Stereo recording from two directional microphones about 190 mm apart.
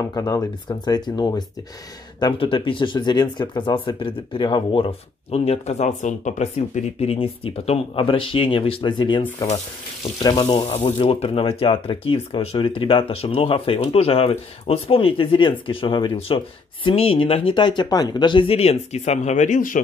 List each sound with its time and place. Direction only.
0.0 s speech: 20° left (ahead or behind)
10.2 s speech: 20° left (ahead or behind)
10.7 s speech: 30° left (ahead or behind)